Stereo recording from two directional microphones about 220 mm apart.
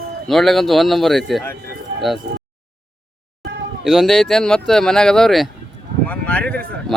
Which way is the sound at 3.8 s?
Centre (ahead or behind).